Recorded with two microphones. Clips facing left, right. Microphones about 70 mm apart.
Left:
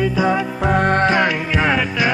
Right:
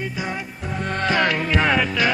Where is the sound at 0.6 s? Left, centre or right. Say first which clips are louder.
Left 12 dB; left.